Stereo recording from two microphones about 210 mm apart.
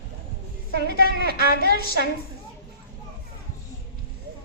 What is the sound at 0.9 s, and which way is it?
Speech, 45° right (ahead or behind).